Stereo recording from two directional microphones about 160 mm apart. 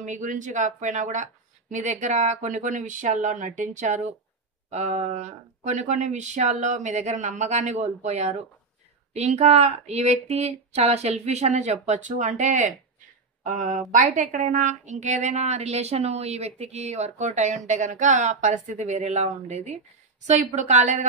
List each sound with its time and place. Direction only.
0.0 s a woman's voice: 50° right (ahead or behind)